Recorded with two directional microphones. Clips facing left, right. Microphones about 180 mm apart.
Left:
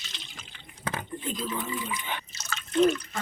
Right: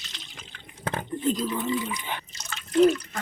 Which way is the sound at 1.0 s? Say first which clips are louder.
Right 8 dB; 40° right (ahead or behind).